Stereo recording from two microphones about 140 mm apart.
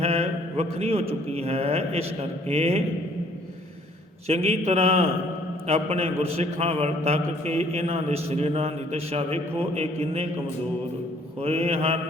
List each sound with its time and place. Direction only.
0.0 s a man's voice: 45° right (ahead or behind)
4.3 s a man's voice: 50° right (ahead or behind)
11.3 s a man's voice: 45° right (ahead or behind)